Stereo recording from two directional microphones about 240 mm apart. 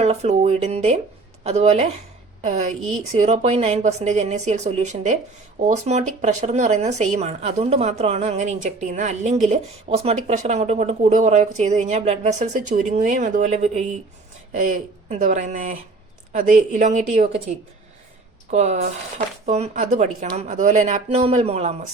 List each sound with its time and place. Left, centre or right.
0.0 s speech: right
18.5 s speech: right